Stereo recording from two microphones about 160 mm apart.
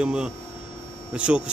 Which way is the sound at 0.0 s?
5° right (ahead or behind).